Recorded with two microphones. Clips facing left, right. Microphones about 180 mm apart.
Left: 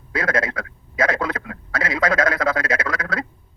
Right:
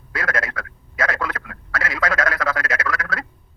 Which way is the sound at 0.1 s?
20° left (ahead or behind).